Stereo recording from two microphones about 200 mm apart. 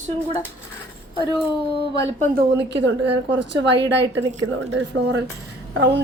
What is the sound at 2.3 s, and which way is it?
A woman's voice, 60° right (ahead or behind).